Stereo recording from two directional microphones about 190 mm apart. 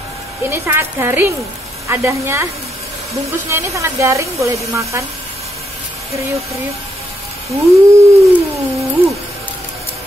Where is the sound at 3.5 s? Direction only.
15° right (ahead or behind).